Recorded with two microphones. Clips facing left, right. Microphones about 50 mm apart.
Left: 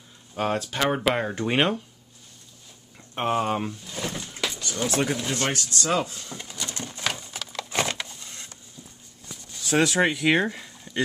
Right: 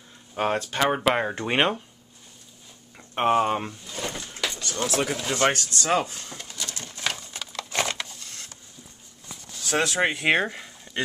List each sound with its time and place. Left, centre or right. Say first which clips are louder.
0.3 s speech: right 1 dB; centre
3.0 s speech: right 4 dB; centre
3.9 s vehicle: even; centre
4.4 s vehicle: even; centre
5.3 s speech: right 4 dB; right
6.2 s a sound: left 1 dB; centre
6.8 s a sound: left 1 dB; centre
9.7 s speech: left 2 dB; centre
10.1 s speech: even; right
10.4 s a sound: left 1 dB; centre